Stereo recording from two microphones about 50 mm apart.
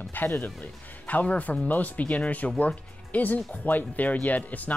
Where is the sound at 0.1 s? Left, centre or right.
Left.